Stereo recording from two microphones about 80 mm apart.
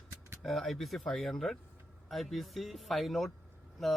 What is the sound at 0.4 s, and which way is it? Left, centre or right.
Speech, centre.